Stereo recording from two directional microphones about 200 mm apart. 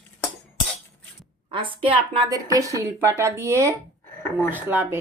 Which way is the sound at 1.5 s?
25° right (ahead or behind).